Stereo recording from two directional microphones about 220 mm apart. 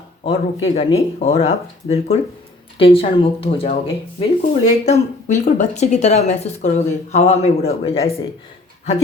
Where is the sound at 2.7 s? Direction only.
25° left (ahead or behind).